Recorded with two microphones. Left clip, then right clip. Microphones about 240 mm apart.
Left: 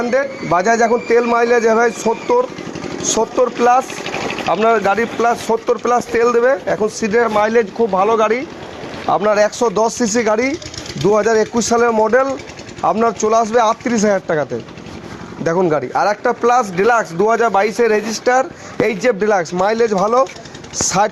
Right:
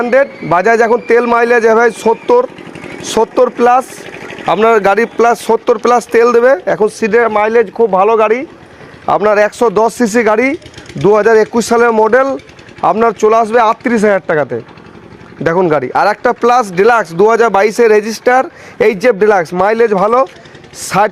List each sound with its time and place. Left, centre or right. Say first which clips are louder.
0.0 s speech: right 6 dB; right
3.9 s vehicle: left 5 dB; centre
4.4 s speech: right 6 dB; right
15.4 s speech: right 5 dB; right